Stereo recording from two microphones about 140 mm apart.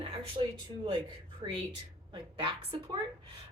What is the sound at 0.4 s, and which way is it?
Speech, 45° right (ahead or behind).